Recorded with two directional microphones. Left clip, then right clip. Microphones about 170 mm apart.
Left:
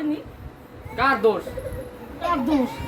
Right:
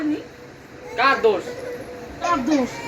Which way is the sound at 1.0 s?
90° left.